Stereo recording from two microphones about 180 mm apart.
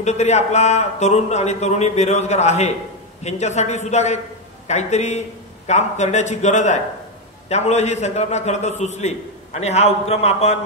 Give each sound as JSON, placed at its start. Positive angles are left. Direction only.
{"t": 0.0, "sound": "a man's voice", "side_deg": 40}